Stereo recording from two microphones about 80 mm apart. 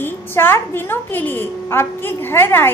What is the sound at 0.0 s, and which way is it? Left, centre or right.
A woman's voice, left.